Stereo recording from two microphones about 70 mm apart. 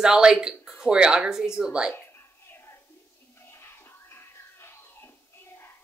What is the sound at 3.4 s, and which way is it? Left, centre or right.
Music, left.